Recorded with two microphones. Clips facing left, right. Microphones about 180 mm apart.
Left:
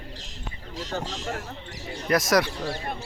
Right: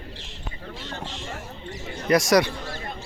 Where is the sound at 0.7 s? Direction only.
40° left (ahead or behind).